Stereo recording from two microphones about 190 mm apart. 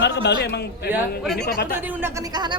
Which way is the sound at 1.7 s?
10° right (ahead or behind).